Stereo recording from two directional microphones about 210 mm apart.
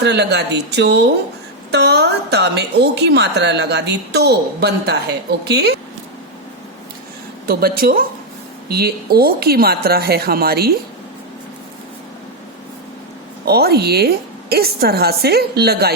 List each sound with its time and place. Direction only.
0.0 s a woman's voice: 55° right (ahead or behind)
7.4 s a woman's voice: 45° right (ahead or behind)
13.4 s a woman's voice: 50° right (ahead or behind)